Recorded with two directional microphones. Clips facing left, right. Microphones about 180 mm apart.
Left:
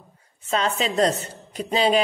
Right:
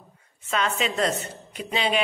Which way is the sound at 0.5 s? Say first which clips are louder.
Left 2 dB; 35° left (ahead or behind).